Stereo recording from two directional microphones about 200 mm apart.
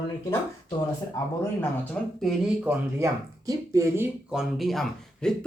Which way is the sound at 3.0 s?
15° right (ahead or behind).